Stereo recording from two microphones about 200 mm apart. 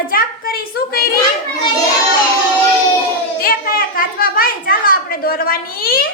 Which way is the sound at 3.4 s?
45° left (ahead or behind).